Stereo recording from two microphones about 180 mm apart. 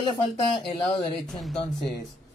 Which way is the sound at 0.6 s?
30° left (ahead or behind).